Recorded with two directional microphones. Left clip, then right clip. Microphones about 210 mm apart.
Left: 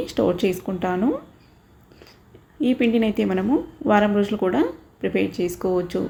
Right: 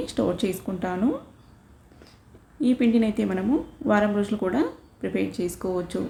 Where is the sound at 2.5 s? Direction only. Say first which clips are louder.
Left 2 dB; 5° left (ahead or behind).